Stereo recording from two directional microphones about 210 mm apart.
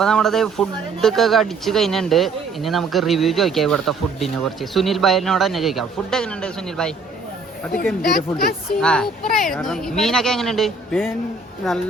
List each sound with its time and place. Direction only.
0.0 s speech: centre (ahead or behind)
8.0 s speech: 50° left (ahead or behind)
8.8 s speech: 5° left (ahead or behind)